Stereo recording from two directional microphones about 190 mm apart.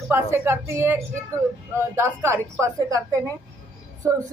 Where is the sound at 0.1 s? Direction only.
15° right (ahead or behind).